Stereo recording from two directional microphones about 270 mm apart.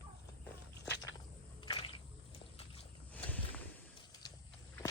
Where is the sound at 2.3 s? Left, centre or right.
Left.